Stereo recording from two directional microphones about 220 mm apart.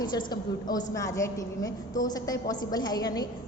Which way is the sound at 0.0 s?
20° left (ahead or behind).